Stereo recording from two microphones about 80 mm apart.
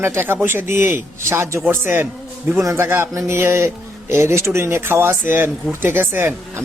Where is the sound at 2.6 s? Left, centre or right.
Right.